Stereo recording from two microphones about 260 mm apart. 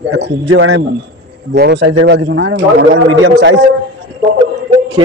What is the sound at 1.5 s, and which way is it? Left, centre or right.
A man's voice, right.